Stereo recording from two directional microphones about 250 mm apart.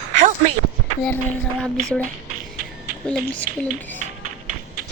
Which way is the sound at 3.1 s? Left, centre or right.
Centre.